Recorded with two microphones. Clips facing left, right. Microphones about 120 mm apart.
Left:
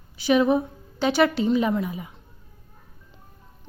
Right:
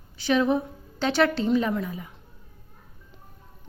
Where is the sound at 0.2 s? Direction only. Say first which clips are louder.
Left 3 dB; 10° left (ahead or behind).